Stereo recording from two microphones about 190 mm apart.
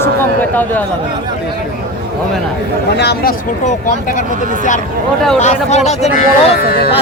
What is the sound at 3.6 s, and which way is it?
Speech, 40° left (ahead or behind).